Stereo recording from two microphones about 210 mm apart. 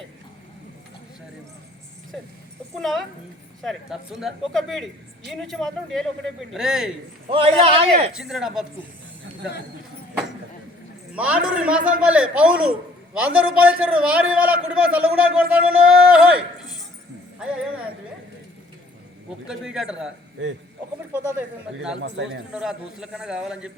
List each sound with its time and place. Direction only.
2.7 s a man's voice: centre (ahead or behind)
7.3 s a man's voice: 25° right (ahead or behind)
8.1 s a man's voice: centre (ahead or behind)
11.1 s a man's voice: 5° right (ahead or behind)
19.5 s a man's voice: 5° right (ahead or behind)
21.1 s speech: 10° right (ahead or behind)
22.0 s a man's voice: 55° right (ahead or behind)
22.5 s a man's voice: 5° right (ahead or behind)